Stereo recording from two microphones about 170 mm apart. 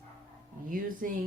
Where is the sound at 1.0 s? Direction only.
55° right (ahead or behind).